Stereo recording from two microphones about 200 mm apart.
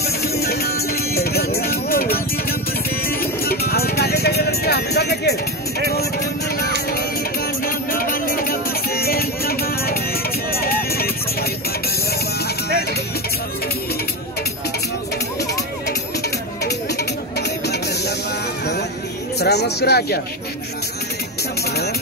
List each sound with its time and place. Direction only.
0.0 s music: 50° left (ahead or behind)
10.5 s clip-clop: 50° left (ahead or behind)
17.4 s a sound: 55° left (ahead or behind)
19.4 s speech: 55° left (ahead or behind)